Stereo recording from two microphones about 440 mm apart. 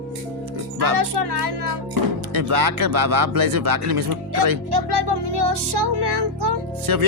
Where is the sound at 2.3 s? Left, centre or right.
Right.